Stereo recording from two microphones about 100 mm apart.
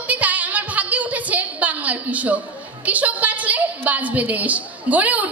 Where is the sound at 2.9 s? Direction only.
15° right (ahead or behind).